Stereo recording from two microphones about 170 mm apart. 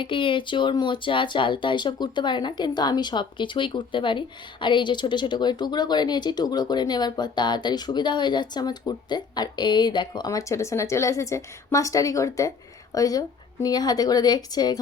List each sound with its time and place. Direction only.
0.0 s a woman's voice: 30° left (ahead or behind)